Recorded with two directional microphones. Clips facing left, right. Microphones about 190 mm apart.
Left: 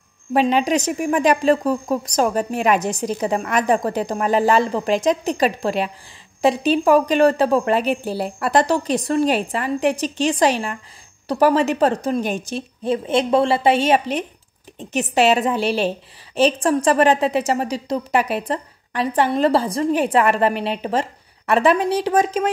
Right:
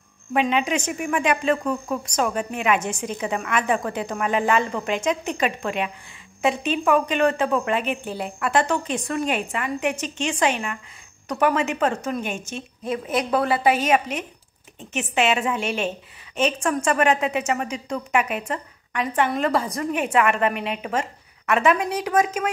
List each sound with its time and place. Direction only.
0.3 s a woman's voice: 35° left (ahead or behind)